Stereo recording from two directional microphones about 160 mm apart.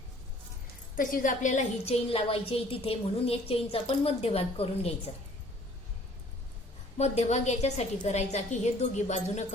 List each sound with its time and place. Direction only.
0.9 s a woman's voice: 55° left (ahead or behind); by 4.9 s 40° left (ahead or behind)
6.9 s a woman's voice: 40° left (ahead or behind)